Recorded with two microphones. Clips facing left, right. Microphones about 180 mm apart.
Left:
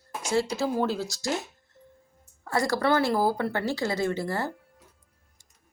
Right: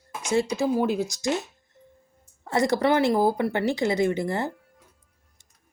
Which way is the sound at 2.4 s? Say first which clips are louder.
Right 3 dB; 20° right (ahead or behind).